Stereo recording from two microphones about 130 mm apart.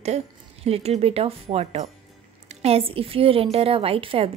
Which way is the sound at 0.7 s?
50° right (ahead or behind).